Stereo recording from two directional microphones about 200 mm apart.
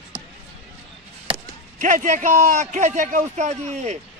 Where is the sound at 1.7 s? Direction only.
40° right (ahead or behind).